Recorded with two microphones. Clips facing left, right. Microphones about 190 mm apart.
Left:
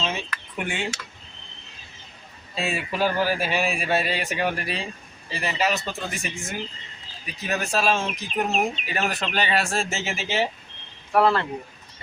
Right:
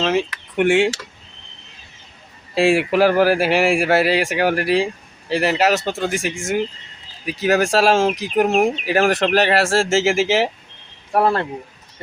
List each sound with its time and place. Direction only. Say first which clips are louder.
0.0 s speech: right 10 dB; 80° right
2.6 s speech: right 11 dB; 90° right
11.1 s speech: right 2 dB; 40° right (ahead or behind)